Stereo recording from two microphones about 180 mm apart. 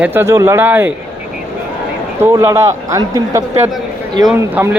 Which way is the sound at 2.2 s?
15° right (ahead or behind).